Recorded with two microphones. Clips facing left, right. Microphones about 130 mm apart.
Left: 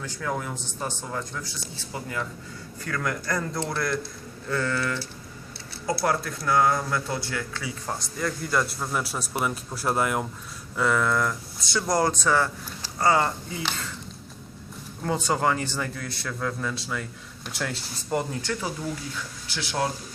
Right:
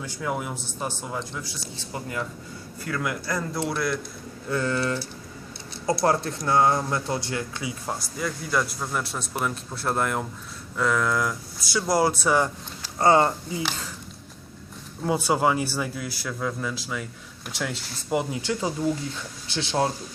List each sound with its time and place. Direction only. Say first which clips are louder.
0.0 s a man's voice: right 1 dB; 15° right (ahead or behind)
1.9 s speech: right 1 dB; 25° right (ahead or behind)
2.8 s speech: even; 10° right (ahead or behind)
4.4 s speech: right 2 dB; 15° right (ahead or behind)
7.9 s speech: left 1 dB; 5° right (ahead or behind)
13.0 s a man's voice: right 3 dB; 25° right (ahead or behind)
15.0 s a man's voice: right 2 dB; 10° right (ahead or behind)